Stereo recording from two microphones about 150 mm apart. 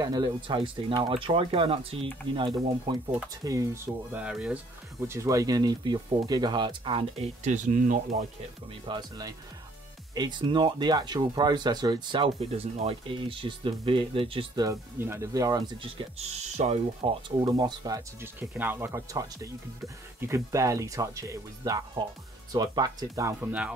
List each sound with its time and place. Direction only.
0.0 s speech: 30° right (ahead or behind)
3.4 s speech: 20° right (ahead or behind)
5.0 s speech: 20° right (ahead or behind); by 7.2 s 35° right (ahead or behind)
7.4 s speech: 55° right (ahead or behind)
8.8 s speech: 30° right (ahead or behind)
16.2 s speech: 45° right (ahead or behind)
17.4 s speech: 25° right (ahead or behind)